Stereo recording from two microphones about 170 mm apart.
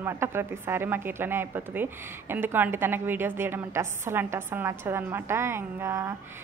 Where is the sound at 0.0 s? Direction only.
15° right (ahead or behind).